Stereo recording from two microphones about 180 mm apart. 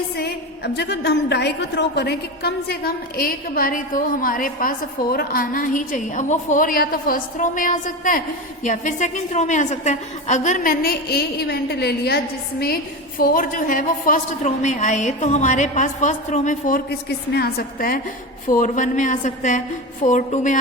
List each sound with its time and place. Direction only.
0.2 s a woman's voice: 65° left (ahead or behind); by 20.6 s 45° left (ahead or behind)